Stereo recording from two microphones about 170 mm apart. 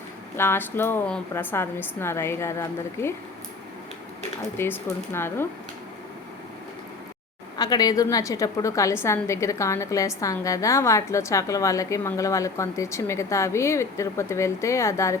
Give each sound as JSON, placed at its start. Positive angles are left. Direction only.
{"t": 0.3, "sound": "a woman's voice", "side_deg": 15}
{"t": 4.5, "sound": "a woman's voice", "side_deg": 15}
{"t": 7.5, "sound": "a woman's voice", "side_deg": 25}